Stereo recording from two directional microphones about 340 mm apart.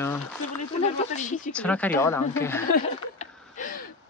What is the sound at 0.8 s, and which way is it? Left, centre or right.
Speech, centre.